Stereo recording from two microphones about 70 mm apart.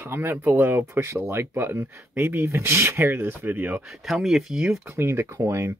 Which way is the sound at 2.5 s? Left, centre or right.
Right.